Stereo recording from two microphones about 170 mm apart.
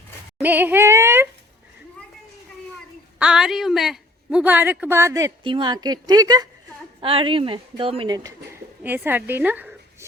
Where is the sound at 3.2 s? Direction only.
5° right (ahead or behind); by 8.3 s 25° right (ahead or behind).